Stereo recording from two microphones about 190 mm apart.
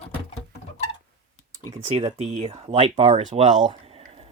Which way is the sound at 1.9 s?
35° right (ahead or behind).